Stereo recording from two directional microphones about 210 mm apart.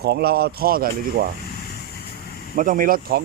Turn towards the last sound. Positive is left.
turn(degrees=-45)  # may be behind; listen again after turning